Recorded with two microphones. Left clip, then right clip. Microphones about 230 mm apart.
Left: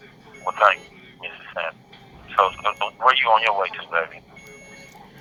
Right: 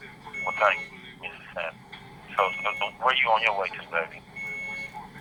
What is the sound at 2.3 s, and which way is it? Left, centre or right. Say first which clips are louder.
Speech: left 6 dB; left.